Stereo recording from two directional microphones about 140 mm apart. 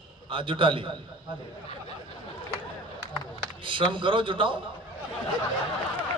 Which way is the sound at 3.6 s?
35° right (ahead or behind).